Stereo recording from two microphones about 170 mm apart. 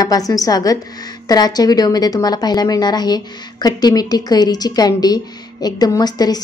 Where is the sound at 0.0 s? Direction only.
20° left (ahead or behind).